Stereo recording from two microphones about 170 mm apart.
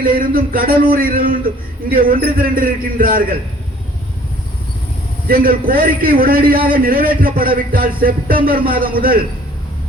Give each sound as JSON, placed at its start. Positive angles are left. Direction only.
{"t": 0.0, "sound": "a man's voice", "side_deg": -55}
{"t": 5.3, "sound": "a man's voice", "side_deg": -60}